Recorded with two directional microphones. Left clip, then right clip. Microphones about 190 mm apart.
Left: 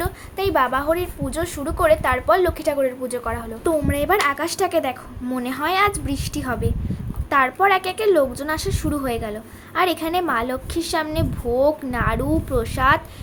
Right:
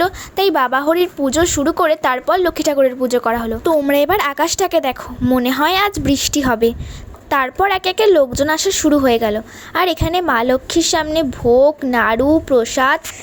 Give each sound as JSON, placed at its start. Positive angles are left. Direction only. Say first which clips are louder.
{"t": 0.0, "sound": "a woman's voice", "louder": "right 9 dB", "side_deg": -45}